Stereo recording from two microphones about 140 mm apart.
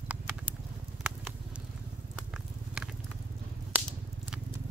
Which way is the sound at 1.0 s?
5° right (ahead or behind).